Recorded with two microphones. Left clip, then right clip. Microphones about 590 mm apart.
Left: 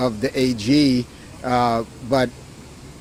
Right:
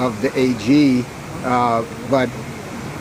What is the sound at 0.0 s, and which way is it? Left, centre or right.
Speech, left.